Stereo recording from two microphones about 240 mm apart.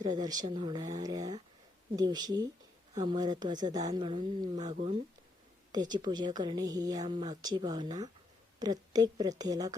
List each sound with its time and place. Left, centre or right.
0.0 s a woman's voice: centre
2.9 s speech: right
3.2 s a woman's voice: centre